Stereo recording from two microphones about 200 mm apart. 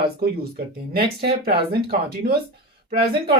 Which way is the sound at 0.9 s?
50° right (ahead or behind).